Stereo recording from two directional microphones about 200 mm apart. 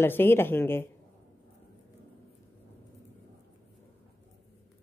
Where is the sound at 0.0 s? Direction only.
10° left (ahead or behind).